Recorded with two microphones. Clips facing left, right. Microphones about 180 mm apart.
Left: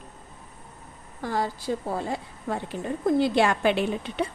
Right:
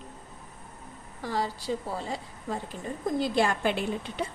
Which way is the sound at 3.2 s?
70° left (ahead or behind).